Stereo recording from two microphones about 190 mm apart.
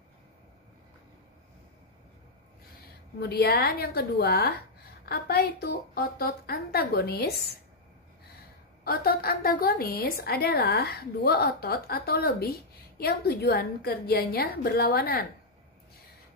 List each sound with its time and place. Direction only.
3.2 s a woman's voice: 55° left (ahead or behind)
8.8 s a woman's voice: 55° left (ahead or behind)